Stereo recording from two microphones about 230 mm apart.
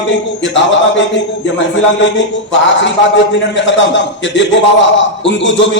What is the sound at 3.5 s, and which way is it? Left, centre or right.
A man's voice, left.